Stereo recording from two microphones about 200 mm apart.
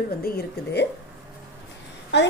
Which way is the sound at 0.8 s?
55° left (ahead or behind).